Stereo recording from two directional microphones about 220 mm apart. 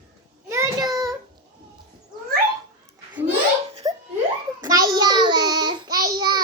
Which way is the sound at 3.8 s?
15° right (ahead or behind).